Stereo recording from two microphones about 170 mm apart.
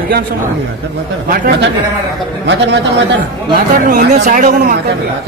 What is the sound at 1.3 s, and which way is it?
Speech, 70° right (ahead or behind).